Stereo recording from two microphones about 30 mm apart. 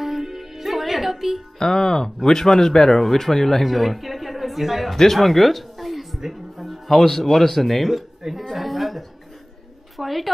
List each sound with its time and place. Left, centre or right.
0.0 s music: centre
1.6 s speech: centre
3.6 s a woman's voice: centre
8.5 s a sound: centre
9.9 s a woman's voice: centre